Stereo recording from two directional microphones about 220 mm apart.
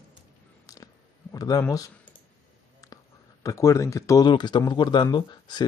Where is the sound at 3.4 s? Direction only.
15° left (ahead or behind).